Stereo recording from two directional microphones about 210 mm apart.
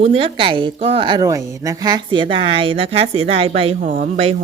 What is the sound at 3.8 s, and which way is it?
Speech, 40° right (ahead or behind).